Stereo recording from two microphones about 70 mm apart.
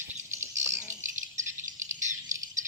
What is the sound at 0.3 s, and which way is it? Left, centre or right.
Bird, right.